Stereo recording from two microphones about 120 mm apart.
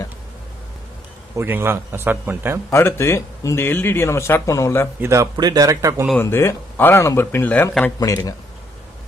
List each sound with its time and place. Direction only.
1.3 s a man's voice: 20° right (ahead or behind)
2.7 s speech: 20° left (ahead or behind)
5.0 s a man's voice: 25° right (ahead or behind)
6.2 s speech: 20° left (ahead or behind)
8.0 s speech: 30° left (ahead or behind)